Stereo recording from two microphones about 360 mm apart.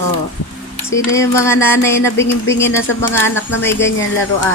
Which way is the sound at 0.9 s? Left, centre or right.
Centre.